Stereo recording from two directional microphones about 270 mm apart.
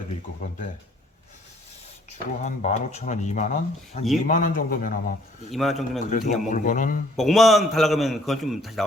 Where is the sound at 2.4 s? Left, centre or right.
Left.